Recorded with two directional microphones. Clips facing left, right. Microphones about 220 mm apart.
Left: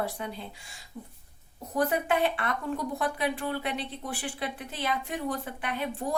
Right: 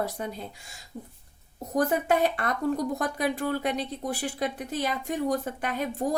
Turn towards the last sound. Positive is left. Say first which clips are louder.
# right 3 dB
turn(degrees=-40)  # may be behind; listen again after turning